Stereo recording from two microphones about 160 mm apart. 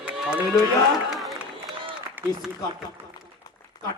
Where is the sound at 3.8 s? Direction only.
25° left (ahead or behind).